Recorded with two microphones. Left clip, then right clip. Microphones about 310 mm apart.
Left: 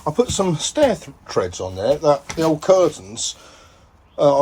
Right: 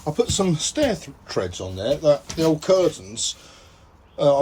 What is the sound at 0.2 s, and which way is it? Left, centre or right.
Speech, centre.